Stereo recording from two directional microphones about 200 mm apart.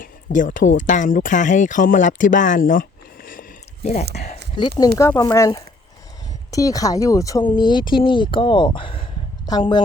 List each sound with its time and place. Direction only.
0.0 s speech: 40° left (ahead or behind)
4.1 s speech: 40° left (ahead or behind)
4.9 s speech: 15° left (ahead or behind)